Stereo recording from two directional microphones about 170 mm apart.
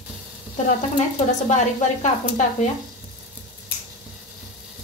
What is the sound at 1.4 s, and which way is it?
A woman's voice, 45° left (ahead or behind).